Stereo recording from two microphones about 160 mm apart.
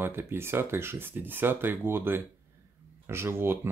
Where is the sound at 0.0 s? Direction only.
15° right (ahead or behind).